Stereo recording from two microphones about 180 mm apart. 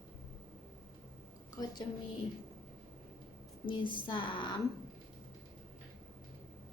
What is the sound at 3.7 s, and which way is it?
Speech, 25° left (ahead or behind).